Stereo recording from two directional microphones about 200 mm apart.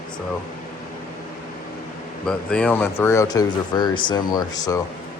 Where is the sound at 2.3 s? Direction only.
5° left (ahead or behind).